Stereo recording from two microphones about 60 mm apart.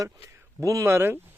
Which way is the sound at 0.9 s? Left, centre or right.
Right.